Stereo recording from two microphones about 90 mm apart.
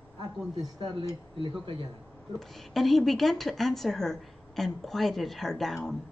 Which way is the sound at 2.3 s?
5° left (ahead or behind).